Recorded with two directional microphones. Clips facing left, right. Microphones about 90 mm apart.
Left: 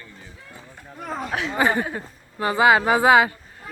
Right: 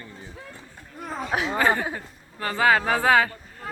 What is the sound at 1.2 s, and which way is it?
Speech, 5° right (ahead or behind).